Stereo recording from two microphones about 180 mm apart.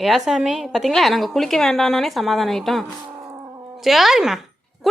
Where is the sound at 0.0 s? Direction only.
Centre (ahead or behind).